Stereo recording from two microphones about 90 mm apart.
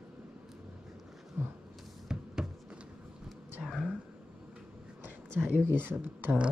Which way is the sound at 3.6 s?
Centre (ahead or behind).